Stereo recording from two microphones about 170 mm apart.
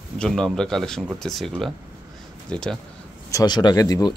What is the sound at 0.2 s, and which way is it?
Speech, 5° left (ahead or behind).